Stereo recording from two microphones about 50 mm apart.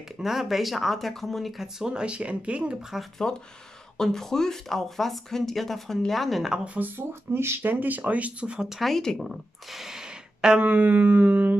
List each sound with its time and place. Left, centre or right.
0.2 s speech: centre
1.9 s speech: centre
3.2 s speech: centre
6.5 s speech: right
6.8 s speech: right
7.6 s speech: right
8.6 s speech: centre
8.9 s speech: centre
10.6 s speech: right